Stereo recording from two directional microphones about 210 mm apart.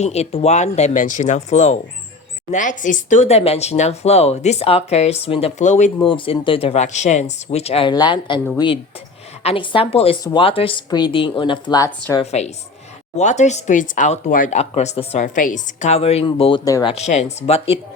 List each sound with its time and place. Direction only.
0.0 s speech: 30° left (ahead or behind)
11.9 s speech: 10° left (ahead or behind)
12.2 s speech: 30° left (ahead or behind)
16.9 s speech: 30° left (ahead or behind)